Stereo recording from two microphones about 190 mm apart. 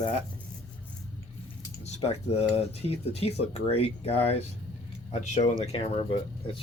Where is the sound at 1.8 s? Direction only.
35° left (ahead or behind).